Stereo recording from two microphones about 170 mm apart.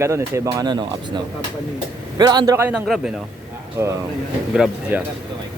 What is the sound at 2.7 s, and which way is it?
Speech, 5° right (ahead or behind).